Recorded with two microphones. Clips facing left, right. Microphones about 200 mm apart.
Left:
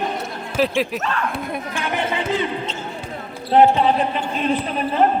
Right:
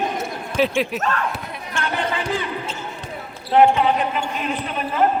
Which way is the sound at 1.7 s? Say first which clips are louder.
Right 1 dB; 20° left (ahead or behind).